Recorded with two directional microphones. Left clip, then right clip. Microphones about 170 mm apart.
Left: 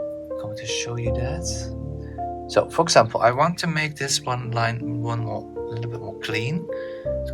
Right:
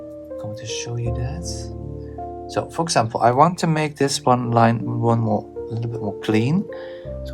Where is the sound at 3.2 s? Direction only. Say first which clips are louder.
Right 3 dB; 25° right (ahead or behind).